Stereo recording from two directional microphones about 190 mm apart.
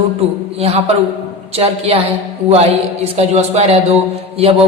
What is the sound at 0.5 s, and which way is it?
Speech, 30° right (ahead or behind).